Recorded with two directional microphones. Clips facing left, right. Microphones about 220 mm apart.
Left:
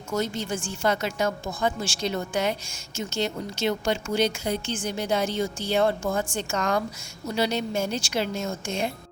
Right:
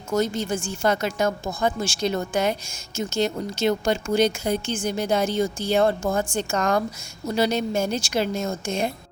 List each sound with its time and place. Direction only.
0.1 s speech: 45° right (ahead or behind)